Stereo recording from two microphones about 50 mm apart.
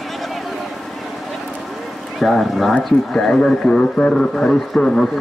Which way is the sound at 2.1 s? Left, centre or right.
Centre.